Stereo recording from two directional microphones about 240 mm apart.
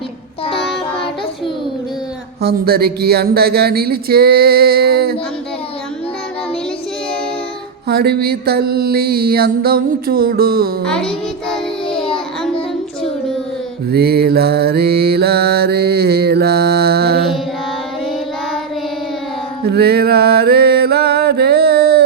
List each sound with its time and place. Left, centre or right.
2.4 s mantra: right
7.9 s mantra: right
10.8 s child singing: centre
13.9 s mantra: right
19.6 s a sound: right